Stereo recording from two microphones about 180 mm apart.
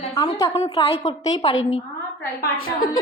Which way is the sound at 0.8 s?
35° left (ahead or behind).